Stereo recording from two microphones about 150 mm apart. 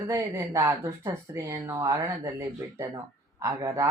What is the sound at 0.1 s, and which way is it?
Speech, 20° right (ahead or behind).